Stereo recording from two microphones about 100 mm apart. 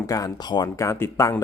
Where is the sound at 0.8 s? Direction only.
25° left (ahead or behind).